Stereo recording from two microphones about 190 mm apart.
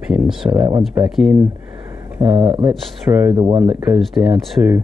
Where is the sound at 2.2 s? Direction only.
25° right (ahead or behind).